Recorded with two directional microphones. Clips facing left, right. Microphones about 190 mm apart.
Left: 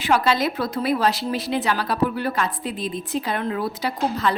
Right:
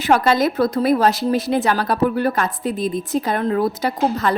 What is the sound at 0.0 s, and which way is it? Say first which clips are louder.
A woman's voice: right 4 dB; 45° right (ahead or behind).